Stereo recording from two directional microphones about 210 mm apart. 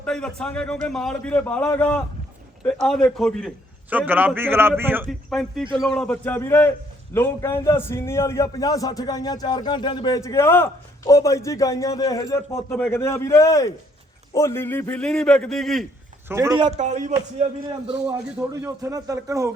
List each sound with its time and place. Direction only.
0.0 s a man's voice: 5° left (ahead or behind)
5.8 s a man's voice: centre (ahead or behind)
16.3 s a man's voice: 15° right (ahead or behind)
16.6 s speech: 35° right (ahead or behind)
17.8 s a man's voice: 15° right (ahead or behind)